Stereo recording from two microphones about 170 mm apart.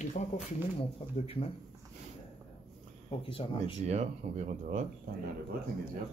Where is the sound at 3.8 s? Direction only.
40° right (ahead or behind).